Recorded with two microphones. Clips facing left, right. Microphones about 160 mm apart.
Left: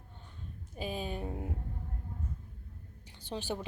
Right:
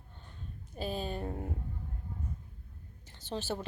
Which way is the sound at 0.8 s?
10° left (ahead or behind).